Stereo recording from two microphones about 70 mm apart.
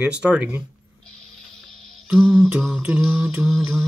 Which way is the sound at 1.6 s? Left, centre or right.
Centre.